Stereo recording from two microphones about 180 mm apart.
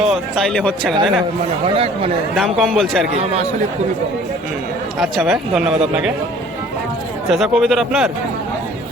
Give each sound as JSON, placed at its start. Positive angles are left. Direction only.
{"t": 0.1, "sound": "speech", "side_deg": 0}
{"t": 1.6, "sound": "speech", "side_deg": -30}
{"t": 2.3, "sound": "speech", "side_deg": 0}
{"t": 4.9, "sound": "speech", "side_deg": 0}
{"t": 7.3, "sound": "speech", "side_deg": 0}